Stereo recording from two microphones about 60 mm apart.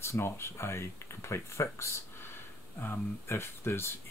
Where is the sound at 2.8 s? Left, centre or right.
Left.